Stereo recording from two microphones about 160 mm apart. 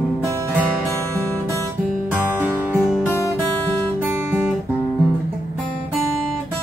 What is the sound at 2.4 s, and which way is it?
Music, 10° right (ahead or behind).